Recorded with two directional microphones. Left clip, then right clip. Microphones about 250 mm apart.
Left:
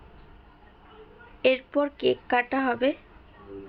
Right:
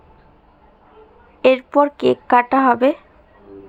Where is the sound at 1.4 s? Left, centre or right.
Right.